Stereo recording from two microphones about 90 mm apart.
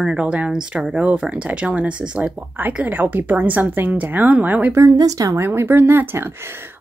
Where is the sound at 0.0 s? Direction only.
10° right (ahead or behind).